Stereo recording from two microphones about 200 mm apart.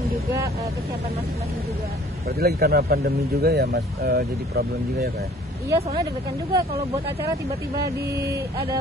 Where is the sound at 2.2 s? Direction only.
50° right (ahead or behind).